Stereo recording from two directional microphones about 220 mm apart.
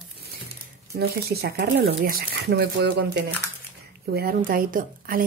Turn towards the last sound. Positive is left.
turn(degrees=-40)  # may be behind; listen again after turning